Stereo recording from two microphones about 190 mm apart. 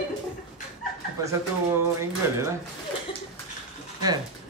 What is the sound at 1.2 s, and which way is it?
Speech, 15° right (ahead or behind).